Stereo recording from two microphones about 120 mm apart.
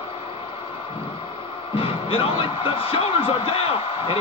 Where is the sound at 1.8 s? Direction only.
50° left (ahead or behind).